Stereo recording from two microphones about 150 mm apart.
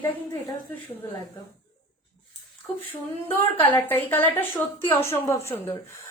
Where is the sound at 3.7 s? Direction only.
15° left (ahead or behind).